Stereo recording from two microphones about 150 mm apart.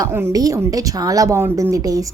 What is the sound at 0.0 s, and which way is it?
Speech, 20° right (ahead or behind).